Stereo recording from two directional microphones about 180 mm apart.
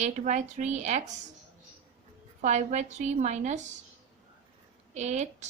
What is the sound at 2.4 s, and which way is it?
Speech, 40° right (ahead or behind).